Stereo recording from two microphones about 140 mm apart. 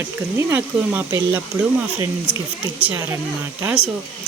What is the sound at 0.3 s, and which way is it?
Speech, 15° right (ahead or behind).